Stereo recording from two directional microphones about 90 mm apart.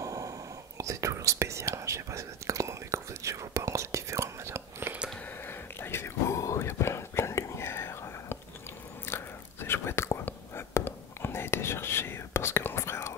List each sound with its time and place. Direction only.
0.0 s whispering: 40° right (ahead or behind)
0.7 s speech: 35° right (ahead or behind)
5.5 s whispering: 25° left (ahead or behind)